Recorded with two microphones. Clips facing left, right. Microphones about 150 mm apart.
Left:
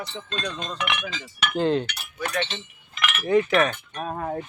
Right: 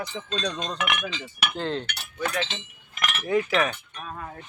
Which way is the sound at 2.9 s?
45° right (ahead or behind).